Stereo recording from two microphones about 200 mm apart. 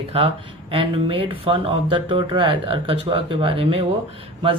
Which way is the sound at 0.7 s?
25° right (ahead or behind).